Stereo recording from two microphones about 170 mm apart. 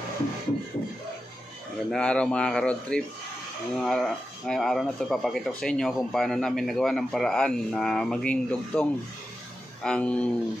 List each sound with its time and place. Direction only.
1.9 s speech: 5° left (ahead or behind)
9.8 s speech: 5° left (ahead or behind)